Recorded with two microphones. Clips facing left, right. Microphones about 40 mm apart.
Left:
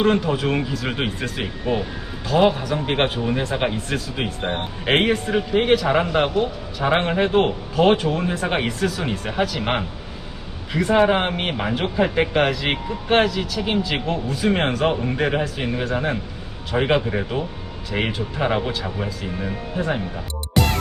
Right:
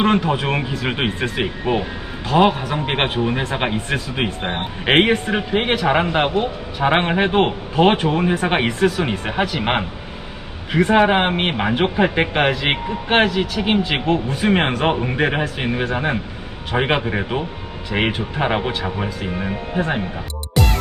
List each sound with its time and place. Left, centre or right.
0.0 s a man's voice: right
20.5 s music: centre